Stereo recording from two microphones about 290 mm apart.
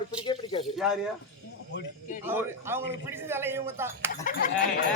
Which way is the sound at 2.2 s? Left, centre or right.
Centre.